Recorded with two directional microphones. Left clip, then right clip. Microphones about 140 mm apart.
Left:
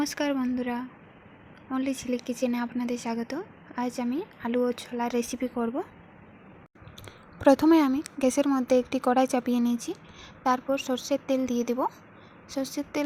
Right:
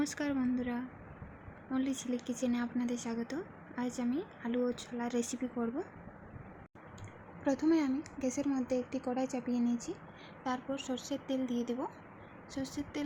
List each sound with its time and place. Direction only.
0.0 s speech: 35° left (ahead or behind)
7.4 s speech: 65° left (ahead or behind)
10.4 s a woman's voice: 50° left (ahead or behind)